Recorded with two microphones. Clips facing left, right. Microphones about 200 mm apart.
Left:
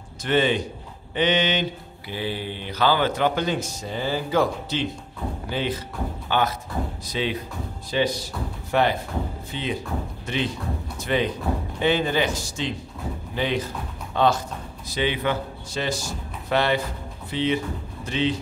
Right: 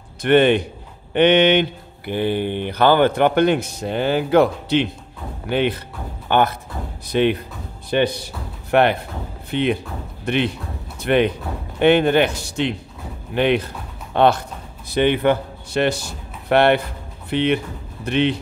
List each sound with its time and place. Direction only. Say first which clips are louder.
0.2 s speech: right 7 dB; 60° right (ahead or behind)